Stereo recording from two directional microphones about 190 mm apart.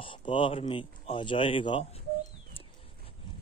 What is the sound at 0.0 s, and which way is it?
Speech, 25° left (ahead or behind).